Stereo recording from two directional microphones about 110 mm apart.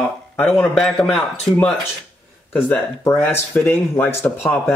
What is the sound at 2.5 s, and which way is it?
A man's voice, 20° left (ahead or behind).